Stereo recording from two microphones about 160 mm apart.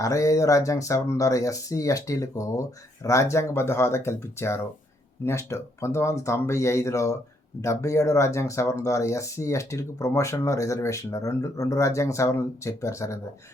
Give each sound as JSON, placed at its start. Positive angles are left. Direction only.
{"t": 0.0, "sound": "speech", "side_deg": 20}